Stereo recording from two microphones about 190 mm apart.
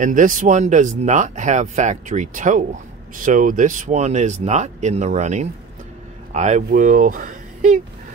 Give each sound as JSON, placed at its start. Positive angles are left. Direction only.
{"t": 0.0, "sound": "speech", "side_deg": -45}